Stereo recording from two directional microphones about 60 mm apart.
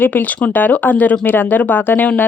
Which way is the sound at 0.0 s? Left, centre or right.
Left.